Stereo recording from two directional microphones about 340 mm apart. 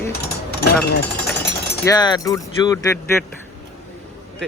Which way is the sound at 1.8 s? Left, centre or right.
Centre.